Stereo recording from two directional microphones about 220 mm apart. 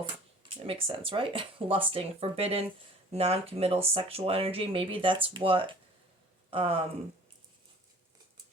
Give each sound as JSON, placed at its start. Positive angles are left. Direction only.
{"t": 0.0, "sound": "speech", "side_deg": -25}